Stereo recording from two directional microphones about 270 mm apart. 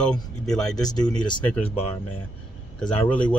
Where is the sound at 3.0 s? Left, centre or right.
Centre.